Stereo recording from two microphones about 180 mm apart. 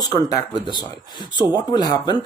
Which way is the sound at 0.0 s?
20° left (ahead or behind).